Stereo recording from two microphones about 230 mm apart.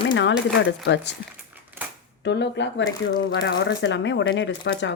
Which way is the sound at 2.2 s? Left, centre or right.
Left.